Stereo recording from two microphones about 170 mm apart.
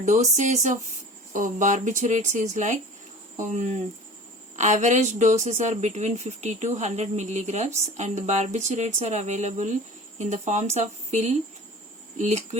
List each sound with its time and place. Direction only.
0.0 s a woman's voice: 45° right (ahead or behind)